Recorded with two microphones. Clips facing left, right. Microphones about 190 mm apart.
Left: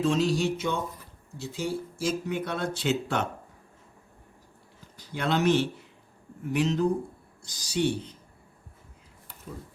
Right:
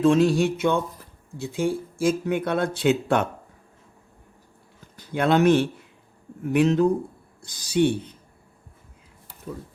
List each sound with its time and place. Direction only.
0.0 s speech: 55° right (ahead or behind)
4.9 s speech: 55° right (ahead or behind)